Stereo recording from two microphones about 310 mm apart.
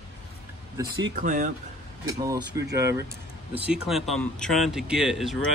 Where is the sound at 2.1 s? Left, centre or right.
Centre.